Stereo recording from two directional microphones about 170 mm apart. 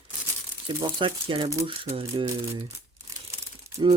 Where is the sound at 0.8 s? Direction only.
30° right (ahead or behind).